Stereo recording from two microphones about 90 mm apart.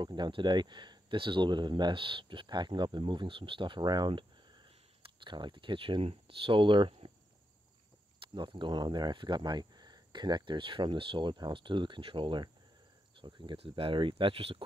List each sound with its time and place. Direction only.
0.0 s speech: 55° right (ahead or behind); by 7.1 s 80° right
8.2 s speech: 70° right (ahead or behind); by 14.6 s 90° right